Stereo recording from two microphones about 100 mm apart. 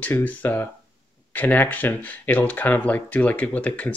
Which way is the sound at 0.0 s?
15° left (ahead or behind).